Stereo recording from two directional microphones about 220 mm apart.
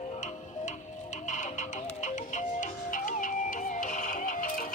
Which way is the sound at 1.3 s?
35° left (ahead or behind).